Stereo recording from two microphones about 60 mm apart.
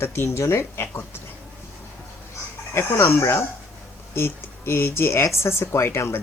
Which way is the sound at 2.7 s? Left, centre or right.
Left.